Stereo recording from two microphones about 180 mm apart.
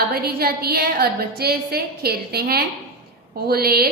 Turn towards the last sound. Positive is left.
turn(degrees=-60)  # may be behind; listen again after turning